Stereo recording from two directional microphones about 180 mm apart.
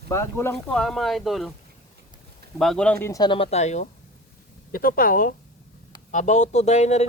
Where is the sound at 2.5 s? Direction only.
5° left (ahead or behind); by 3.8 s 40° left (ahead or behind).